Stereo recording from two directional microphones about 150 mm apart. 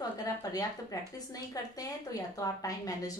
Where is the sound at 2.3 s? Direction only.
20° left (ahead or behind).